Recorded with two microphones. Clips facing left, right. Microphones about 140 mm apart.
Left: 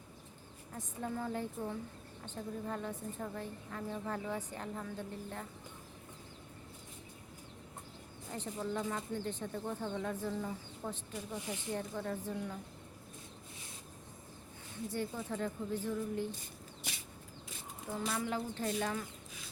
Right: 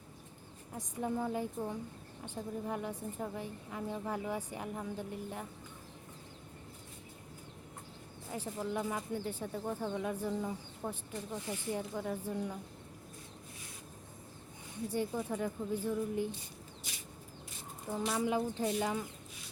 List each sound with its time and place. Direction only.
0.7 s a woman's voice: 10° right (ahead or behind)
8.4 s a woman's voice: 10° right (ahead or behind)
11.3 s speech: 15° left (ahead or behind)
11.7 s a woman's voice: 15° right (ahead or behind)
14.8 s a woman's voice: 15° right (ahead or behind)
16.9 s chicken: 65° left (ahead or behind)
17.8 s a woman's voice: 10° right (ahead or behind)